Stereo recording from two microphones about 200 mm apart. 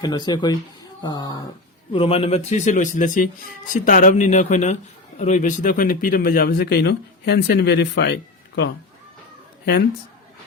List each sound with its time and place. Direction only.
0.0 s a man's voice: 20° left (ahead or behind); by 8.7 s 55° left (ahead or behind)